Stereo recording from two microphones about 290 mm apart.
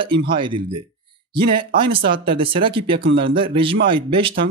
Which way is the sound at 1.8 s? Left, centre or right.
Centre.